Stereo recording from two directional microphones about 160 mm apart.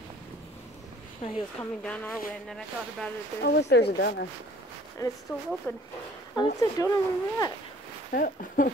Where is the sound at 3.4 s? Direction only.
90° left.